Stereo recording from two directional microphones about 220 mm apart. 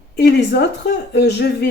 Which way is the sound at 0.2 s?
50° left (ahead or behind).